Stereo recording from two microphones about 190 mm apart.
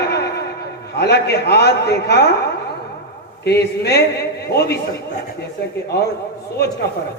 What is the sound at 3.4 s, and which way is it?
A man's voice, 60° left (ahead or behind).